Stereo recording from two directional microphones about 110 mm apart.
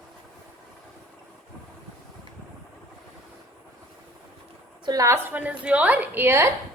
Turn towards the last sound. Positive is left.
turn(degrees=-20)  # may be behind; listen again after turning